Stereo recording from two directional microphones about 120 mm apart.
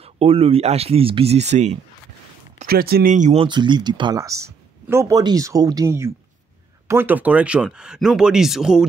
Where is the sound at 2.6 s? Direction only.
75° right (ahead or behind).